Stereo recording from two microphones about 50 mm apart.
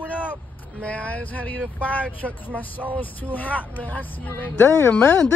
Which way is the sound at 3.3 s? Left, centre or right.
Left.